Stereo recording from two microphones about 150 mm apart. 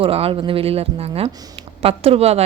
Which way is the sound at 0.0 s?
40° right (ahead or behind).